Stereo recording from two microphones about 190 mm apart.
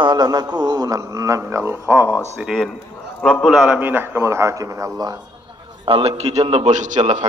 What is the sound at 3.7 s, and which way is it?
A man's voice, 10° right (ahead or behind).